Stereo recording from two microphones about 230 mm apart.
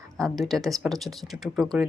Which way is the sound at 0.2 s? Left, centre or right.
Centre.